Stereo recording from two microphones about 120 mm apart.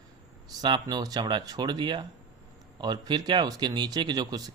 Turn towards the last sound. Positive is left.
turn(degrees=-35)  # may be behind; listen again after turning